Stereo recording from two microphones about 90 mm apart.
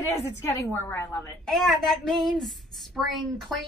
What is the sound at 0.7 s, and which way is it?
Speech, 25° left (ahead or behind).